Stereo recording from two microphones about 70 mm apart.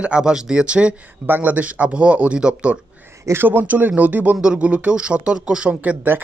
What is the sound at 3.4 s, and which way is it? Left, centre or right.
Speech, right.